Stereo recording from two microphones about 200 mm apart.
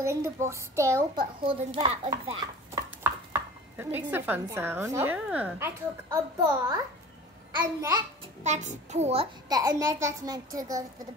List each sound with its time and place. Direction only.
0.0 s a woman's voice: 15° right (ahead or behind)
1.4 s a child's voice: 25° right (ahead or behind)
2.7 s speech: 10° right (ahead or behind)
6.0 s a woman's voice: 20° right (ahead or behind)
8.5 s a child's voice: 35° right (ahead or behind); by 10.9 s 15° right (ahead or behind)